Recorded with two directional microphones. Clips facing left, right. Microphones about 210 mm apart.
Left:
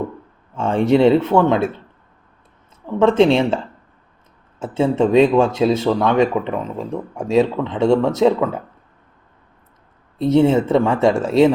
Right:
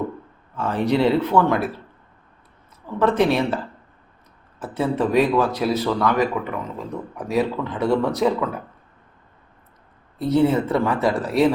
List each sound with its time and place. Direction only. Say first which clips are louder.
0.5 s speech: left 5 dB; 25° left (ahead or behind)
2.8 s speech: left 5 dB; 25° left (ahead or behind)
4.6 s speech: left 5 dB; 25° left (ahead or behind)
10.2 s speech: left 4 dB; 25° left (ahead or behind)